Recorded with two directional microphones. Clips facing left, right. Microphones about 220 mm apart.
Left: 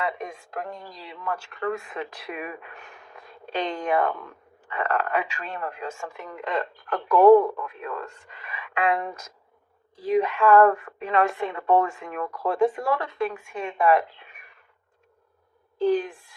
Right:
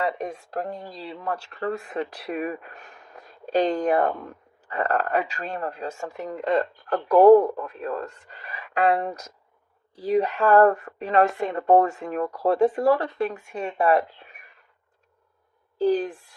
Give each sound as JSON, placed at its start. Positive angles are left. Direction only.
{"t": 0.0, "sound": "speech", "side_deg": -35}
{"t": 15.8, "sound": "speech", "side_deg": -40}